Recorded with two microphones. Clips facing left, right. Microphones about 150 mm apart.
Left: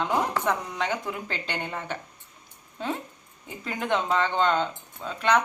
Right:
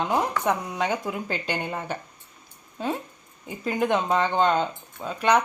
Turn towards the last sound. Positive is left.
turn(degrees=-10)  # may be behind; listen again after turning